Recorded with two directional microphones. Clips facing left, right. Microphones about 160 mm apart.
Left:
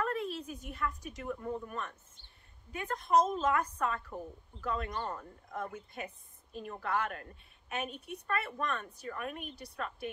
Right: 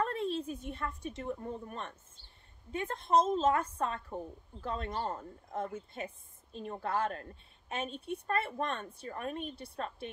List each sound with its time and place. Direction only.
0.0 s a woman's voice: 30° right (ahead or behind)